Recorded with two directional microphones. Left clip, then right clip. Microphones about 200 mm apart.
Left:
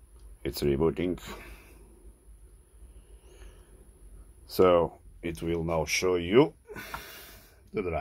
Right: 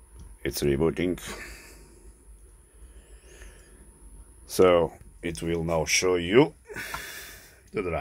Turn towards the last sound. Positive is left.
turn(degrees=5)  # may be behind; listen again after turning